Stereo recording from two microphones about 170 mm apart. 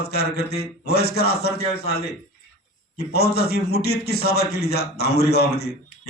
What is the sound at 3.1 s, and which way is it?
A man's voice, 70° left (ahead or behind).